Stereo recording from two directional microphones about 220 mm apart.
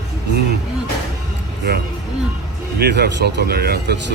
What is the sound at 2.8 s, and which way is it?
Speech, 50° right (ahead or behind).